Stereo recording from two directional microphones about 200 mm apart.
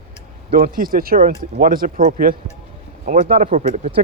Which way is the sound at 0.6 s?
45° right (ahead or behind).